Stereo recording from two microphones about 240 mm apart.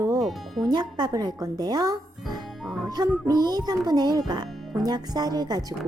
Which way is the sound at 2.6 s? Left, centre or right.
Centre.